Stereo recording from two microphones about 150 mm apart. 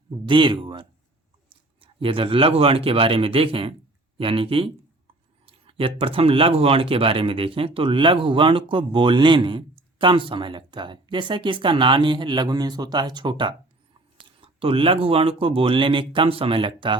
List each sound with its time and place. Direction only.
0.3 s a man's voice: 30° right (ahead or behind)